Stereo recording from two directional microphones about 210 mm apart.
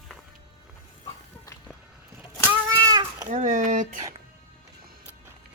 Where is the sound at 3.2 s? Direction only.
35° right (ahead or behind).